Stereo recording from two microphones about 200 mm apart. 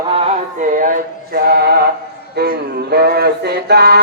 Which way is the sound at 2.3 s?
55° right (ahead or behind).